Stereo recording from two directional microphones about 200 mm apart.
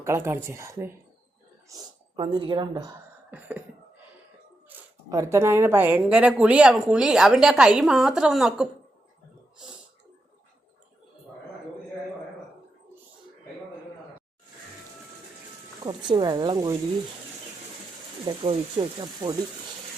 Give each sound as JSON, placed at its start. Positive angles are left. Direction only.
{"t": 0.0, "sound": "a woman's voice", "side_deg": -15}
{"t": 1.7, "sound": "speech", "side_deg": -25}
{"t": 4.7, "sound": "speech", "side_deg": -15}
{"t": 15.8, "sound": "speech", "side_deg": -25}
{"t": 18.3, "sound": "speech", "side_deg": -25}